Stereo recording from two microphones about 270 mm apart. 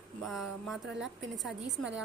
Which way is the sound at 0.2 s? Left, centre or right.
Centre.